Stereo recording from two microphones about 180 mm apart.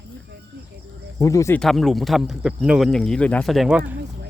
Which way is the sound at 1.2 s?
20° left (ahead or behind).